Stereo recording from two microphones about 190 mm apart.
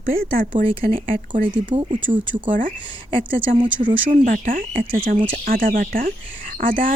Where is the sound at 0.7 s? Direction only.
30° right (ahead or behind).